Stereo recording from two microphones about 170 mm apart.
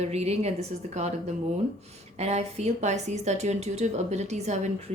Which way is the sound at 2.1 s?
40° right (ahead or behind).